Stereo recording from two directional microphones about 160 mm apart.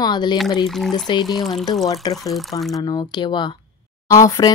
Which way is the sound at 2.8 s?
25° left (ahead or behind).